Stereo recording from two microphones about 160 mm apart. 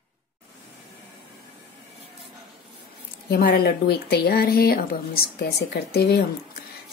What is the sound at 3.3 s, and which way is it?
Speech, 75° left (ahead or behind).